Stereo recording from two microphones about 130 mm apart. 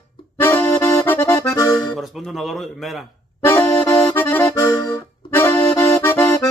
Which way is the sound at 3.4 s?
15° left (ahead or behind).